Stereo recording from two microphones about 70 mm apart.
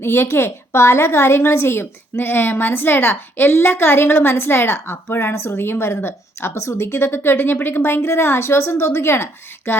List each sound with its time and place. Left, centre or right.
0.0 s a woman's voice: left